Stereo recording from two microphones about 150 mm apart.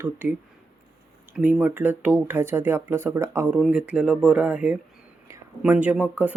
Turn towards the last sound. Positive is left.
turn(degrees=-10)  # may be behind; listen again after turning